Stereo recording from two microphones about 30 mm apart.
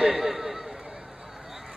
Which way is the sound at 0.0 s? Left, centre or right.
Centre.